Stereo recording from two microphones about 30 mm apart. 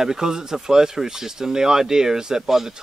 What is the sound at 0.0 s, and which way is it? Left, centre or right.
Speech, right.